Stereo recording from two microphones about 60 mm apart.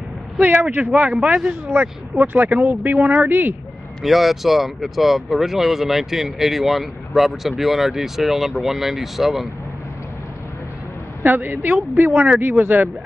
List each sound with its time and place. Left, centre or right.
0.4 s speech: right
1.2 s speech: centre
1.7 s speech: right
4.0 s speech: centre
11.2 s speech: right